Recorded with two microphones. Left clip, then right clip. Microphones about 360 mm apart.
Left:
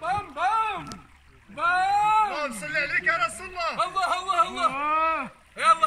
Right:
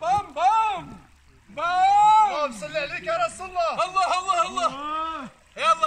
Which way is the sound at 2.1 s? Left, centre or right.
Centre.